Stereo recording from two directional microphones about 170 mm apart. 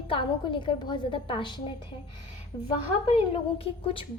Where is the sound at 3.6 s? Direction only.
35° left (ahead or behind).